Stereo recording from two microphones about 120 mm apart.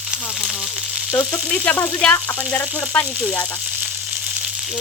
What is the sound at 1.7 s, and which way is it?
Speech, 10° left (ahead or behind).